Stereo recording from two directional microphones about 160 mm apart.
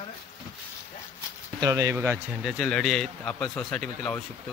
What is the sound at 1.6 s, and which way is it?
Speech, 20° right (ahead or behind).